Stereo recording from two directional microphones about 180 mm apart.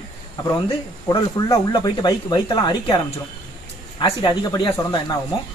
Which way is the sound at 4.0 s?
25° left (ahead or behind).